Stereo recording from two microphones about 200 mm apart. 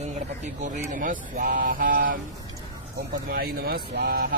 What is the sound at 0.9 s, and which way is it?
Speech, 40° right (ahead or behind).